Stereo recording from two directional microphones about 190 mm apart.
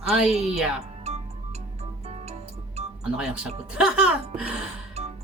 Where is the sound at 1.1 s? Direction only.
35° right (ahead or behind).